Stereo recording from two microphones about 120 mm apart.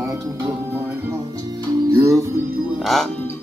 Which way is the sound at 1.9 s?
25° right (ahead or behind).